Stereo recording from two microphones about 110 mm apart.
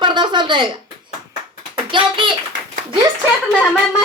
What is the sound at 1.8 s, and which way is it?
Speech, 50° right (ahead or behind).